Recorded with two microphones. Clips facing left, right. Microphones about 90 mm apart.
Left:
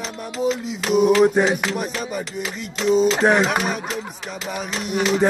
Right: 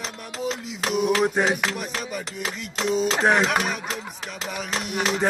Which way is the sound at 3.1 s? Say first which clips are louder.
Left 3 dB; 10° left (ahead or behind).